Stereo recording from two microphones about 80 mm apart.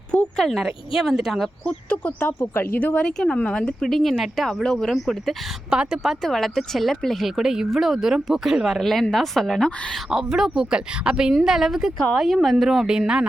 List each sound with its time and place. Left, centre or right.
0.3 s speech: centre
1.6 s speech: centre
2.4 s speech: left
3.0 s speech: centre
5.7 s speech: centre
10.1 s speech: centre